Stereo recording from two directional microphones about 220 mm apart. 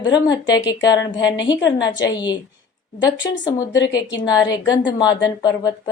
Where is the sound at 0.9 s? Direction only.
55° left (ahead or behind).